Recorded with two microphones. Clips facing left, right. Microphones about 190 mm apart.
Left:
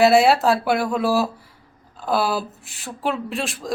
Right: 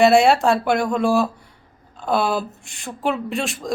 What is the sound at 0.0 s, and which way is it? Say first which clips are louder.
Speech: right 1 dB; centre (ahead or behind).